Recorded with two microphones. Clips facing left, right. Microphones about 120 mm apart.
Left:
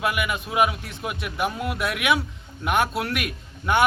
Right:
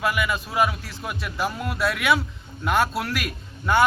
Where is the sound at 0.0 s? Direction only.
20° left (ahead or behind).